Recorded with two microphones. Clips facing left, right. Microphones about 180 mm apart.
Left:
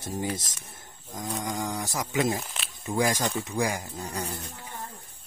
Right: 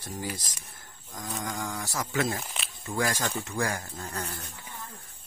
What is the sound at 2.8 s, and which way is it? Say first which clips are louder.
Speech: left 4 dB; 20° left (ahead or behind).